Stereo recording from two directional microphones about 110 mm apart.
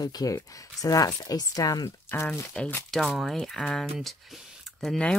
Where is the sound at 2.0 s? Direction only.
20° left (ahead or behind).